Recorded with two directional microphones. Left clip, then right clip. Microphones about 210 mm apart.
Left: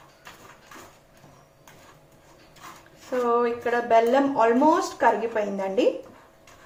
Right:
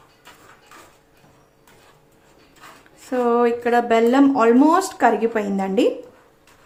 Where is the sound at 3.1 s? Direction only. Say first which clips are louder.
Right 5 dB; 50° right (ahead or behind).